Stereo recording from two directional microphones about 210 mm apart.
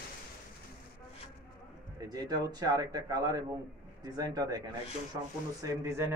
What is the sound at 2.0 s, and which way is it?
Speech, 20° right (ahead or behind).